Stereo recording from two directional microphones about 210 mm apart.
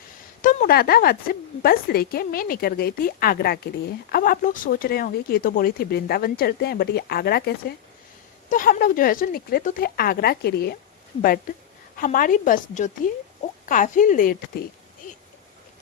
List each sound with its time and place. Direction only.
0.4 s a woman's voice: 40° left (ahead or behind)
11.9 s a woman's voice: 40° left (ahead or behind)